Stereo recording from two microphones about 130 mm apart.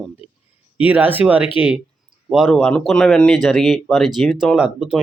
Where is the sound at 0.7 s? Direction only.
10° right (ahead or behind).